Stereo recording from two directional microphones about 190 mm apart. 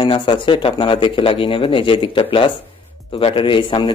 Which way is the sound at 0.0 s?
25° left (ahead or behind).